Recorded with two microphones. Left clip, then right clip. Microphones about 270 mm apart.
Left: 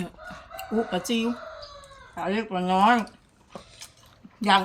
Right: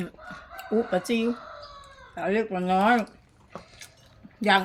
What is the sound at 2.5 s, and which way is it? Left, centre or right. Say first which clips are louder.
Speech: left 4 dB; centre.